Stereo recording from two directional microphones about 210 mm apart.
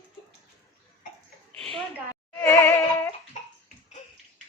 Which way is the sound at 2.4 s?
10° left (ahead or behind).